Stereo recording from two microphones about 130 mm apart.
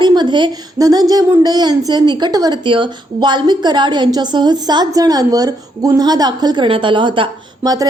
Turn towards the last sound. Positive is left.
turn(degrees=-30)  # may be behind; listen again after turning